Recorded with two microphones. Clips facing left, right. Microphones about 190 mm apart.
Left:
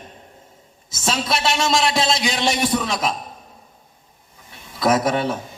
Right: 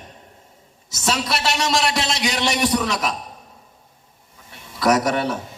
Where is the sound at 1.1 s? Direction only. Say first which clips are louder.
Left 5 dB; 70° right (ahead or behind).